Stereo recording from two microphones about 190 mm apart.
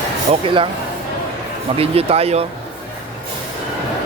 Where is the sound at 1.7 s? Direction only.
30° right (ahead or behind).